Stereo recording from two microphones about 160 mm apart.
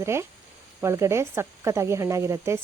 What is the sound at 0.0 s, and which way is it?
Speech, 15° right (ahead or behind).